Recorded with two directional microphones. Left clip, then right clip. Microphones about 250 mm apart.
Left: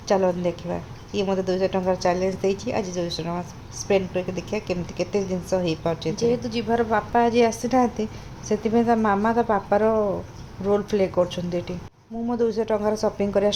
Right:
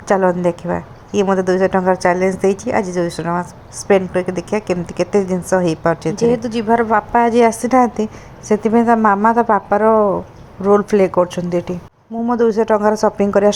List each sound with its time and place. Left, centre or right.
0.1 s a woman's voice: centre
6.1 s a woman's voice: right